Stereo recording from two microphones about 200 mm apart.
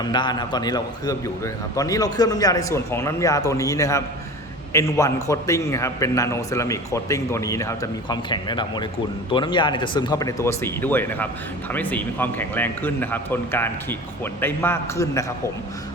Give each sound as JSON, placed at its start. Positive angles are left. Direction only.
{"t": 0.0, "sound": "a man's voice", "side_deg": 20}